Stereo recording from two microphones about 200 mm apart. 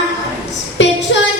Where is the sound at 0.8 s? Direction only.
65° left (ahead or behind).